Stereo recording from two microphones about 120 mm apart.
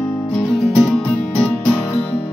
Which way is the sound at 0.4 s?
55° left (ahead or behind).